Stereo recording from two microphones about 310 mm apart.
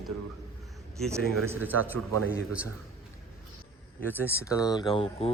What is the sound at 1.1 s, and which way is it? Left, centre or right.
Speech, centre.